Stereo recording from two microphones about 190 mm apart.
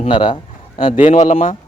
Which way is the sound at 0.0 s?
25° left (ahead or behind).